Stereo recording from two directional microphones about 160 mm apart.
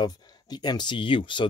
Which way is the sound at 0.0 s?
25° left (ahead or behind).